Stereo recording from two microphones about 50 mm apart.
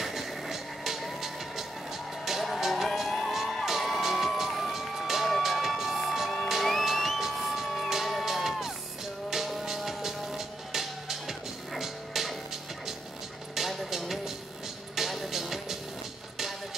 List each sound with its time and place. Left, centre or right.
0.0 s music: centre
2.2 s vehicle: centre
3.6 s music: centre
13.6 s music: centre